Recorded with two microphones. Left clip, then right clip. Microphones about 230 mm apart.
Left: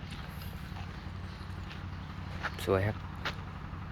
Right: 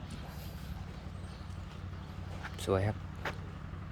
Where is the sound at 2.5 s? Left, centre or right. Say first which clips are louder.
Left 2 dB; centre.